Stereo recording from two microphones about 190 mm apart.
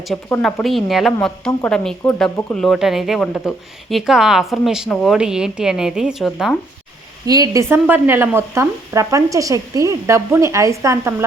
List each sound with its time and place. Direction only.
0.1 s a woman's voice: centre (ahead or behind)
7.3 s speech: 20° right (ahead or behind)